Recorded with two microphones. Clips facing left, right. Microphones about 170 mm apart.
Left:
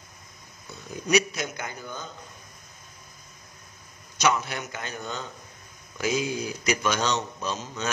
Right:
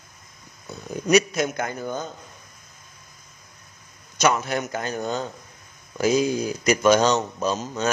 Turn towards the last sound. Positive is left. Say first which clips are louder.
# right 7 dB
turn(degrees=-40)  # may be behind; listen again after turning